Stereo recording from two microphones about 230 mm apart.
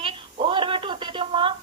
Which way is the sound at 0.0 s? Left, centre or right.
Right.